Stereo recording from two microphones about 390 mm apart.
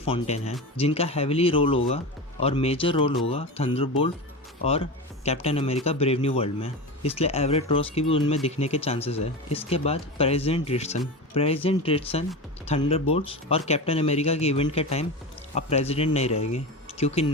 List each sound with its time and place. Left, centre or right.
0.0 s speech: centre